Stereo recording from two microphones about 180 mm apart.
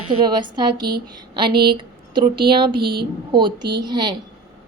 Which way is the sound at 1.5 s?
60° right (ahead or behind).